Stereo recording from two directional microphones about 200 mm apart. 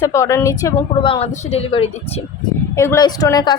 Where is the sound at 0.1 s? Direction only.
15° left (ahead or behind).